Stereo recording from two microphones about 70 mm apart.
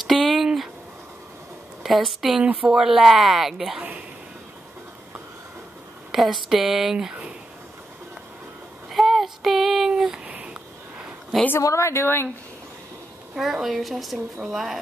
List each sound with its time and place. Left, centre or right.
0.0 s a sound: centre
1.8 s a woman's voice: centre
2.4 s speech: centre
2.8 s a woman's voice: centre
6.1 s a woman's voice: centre
8.9 s child singing: centre
10.2 s a sound: centre
11.6 s a woman's voice: left
13.4 s a woman's voice: centre